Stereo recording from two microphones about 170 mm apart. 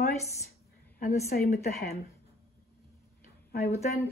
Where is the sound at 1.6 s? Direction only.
65° left (ahead or behind).